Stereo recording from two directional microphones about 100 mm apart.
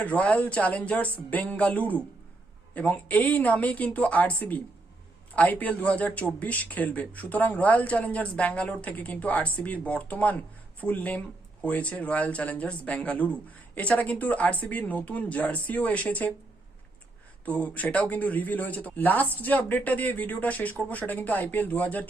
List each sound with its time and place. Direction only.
0.0 s speech: 15° left (ahead or behind)
17.4 s speech: 15° left (ahead or behind)